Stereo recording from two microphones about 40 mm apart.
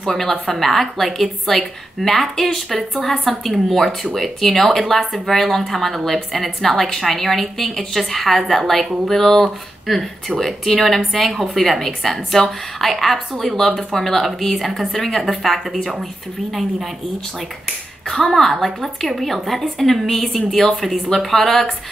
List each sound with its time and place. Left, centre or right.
0.0 s a woman's voice: centre
18.0 s a woman's voice: centre